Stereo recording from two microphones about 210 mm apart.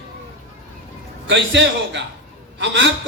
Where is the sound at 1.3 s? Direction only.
55° right (ahead or behind).